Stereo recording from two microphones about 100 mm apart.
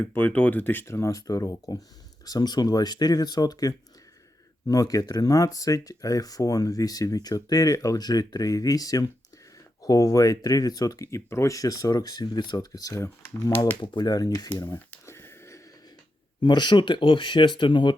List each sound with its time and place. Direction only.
0.0 s speech: 20° left (ahead or behind)
13.8 s speech: 45° left (ahead or behind)
14.5 s a sound: 25° left (ahead or behind)
16.4 s speech: 50° left (ahead or behind)